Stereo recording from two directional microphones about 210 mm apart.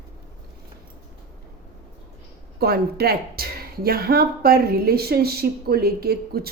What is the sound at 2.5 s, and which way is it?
Speech, 50° right (ahead or behind).